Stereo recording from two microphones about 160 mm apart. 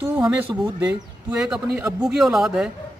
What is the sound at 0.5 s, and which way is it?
Speech, 30° right (ahead or behind).